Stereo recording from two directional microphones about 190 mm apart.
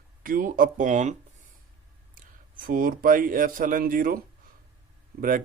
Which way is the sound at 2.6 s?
50° right (ahead or behind).